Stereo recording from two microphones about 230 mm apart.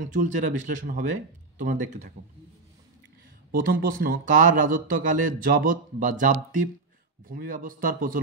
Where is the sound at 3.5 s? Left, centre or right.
Right.